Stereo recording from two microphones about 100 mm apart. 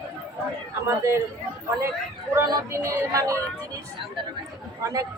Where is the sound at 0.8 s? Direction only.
30° right (ahead or behind).